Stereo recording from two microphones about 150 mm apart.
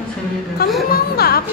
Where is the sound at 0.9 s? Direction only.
90° left.